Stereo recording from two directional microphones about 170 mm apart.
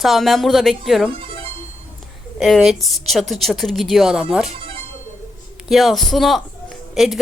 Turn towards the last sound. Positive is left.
turn(degrees=0)  # may be behind; listen again after turning